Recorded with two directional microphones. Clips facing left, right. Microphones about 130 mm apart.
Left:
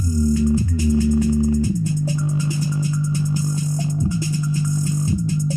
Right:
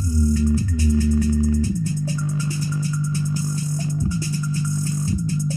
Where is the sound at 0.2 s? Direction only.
20° left (ahead or behind).